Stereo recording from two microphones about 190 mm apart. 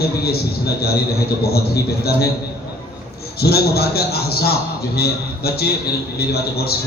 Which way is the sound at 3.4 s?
55° left (ahead or behind).